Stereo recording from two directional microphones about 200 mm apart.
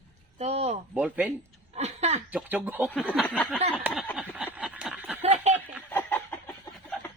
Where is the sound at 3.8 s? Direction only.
10° right (ahead or behind).